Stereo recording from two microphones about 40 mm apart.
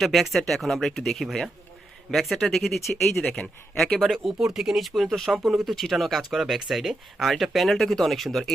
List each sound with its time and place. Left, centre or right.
0.0 s speech: centre
4.4 s speech: centre